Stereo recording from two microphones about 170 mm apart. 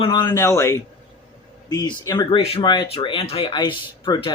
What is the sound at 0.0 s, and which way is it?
A man's voice, 30° left (ahead or behind).